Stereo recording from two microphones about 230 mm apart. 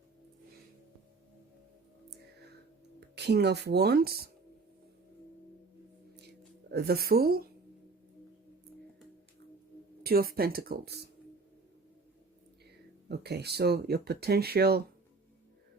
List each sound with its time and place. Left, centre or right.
3.2 s speech: right
6.7 s speech: right
10.0 s speech: right
13.1 s speech: right